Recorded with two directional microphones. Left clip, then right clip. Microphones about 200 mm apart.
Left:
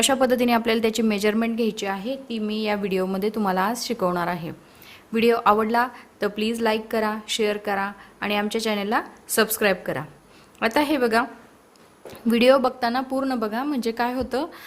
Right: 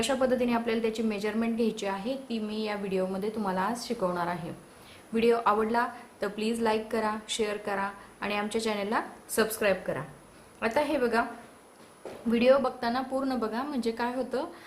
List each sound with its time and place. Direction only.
0.0 s a woman's voice: 45° left (ahead or behind)
12.3 s a woman's voice: 50° left (ahead or behind)